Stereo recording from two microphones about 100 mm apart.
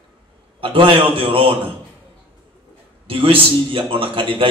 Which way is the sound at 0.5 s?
60° right (ahead or behind).